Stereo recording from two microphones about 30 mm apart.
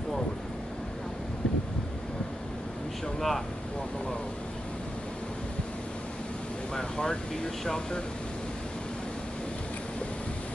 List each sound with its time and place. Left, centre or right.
3.2 s speech: centre
6.7 s speech: left